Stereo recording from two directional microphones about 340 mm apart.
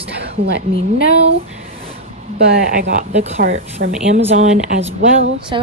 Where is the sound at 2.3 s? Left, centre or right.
Right.